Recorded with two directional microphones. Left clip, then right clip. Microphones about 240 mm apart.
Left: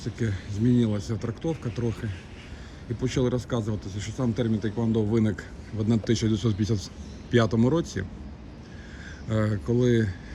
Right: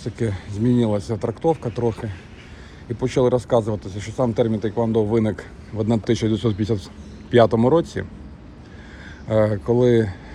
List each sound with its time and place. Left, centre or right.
0.7 s speech: centre
9.3 s speech: centre